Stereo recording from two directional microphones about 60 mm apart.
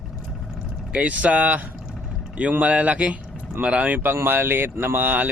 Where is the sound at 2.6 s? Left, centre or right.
Right.